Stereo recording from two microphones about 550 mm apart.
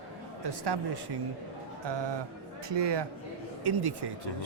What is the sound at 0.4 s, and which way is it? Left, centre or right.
A man's voice, right.